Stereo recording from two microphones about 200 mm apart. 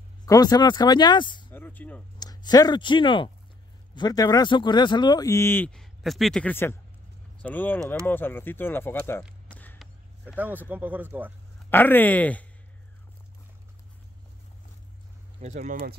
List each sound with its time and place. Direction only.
0.2 s speech: 20° left (ahead or behind)
1.5 s a sound: 10° left (ahead or behind)
2.1 s speech: 20° left (ahead or behind)
9.5 s a sound: 5° left (ahead or behind)
10.2 s speech: 10° right (ahead or behind)
11.7 s speech: 10° left (ahead or behind)
15.4 s speech: 40° right (ahead or behind)